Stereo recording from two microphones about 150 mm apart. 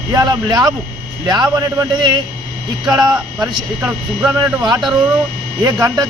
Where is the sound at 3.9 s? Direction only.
10° right (ahead or behind).